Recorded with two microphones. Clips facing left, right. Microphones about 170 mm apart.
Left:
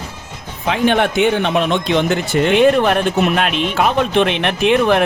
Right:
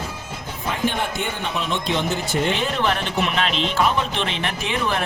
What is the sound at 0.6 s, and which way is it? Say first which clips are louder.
A man's voice: left 9 dB; 85° left.